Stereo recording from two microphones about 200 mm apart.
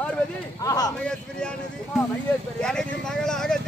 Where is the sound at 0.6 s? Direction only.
20° left (ahead or behind).